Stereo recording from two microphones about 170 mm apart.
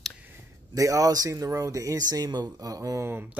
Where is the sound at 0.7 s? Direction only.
20° right (ahead or behind).